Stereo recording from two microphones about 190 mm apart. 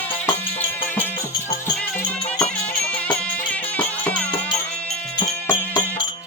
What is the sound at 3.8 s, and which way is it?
Music, 10° left (ahead or behind).